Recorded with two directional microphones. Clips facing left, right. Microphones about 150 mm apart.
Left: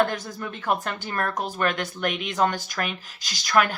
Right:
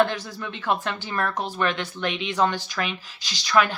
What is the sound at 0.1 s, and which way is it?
Speech, 45° left (ahead or behind).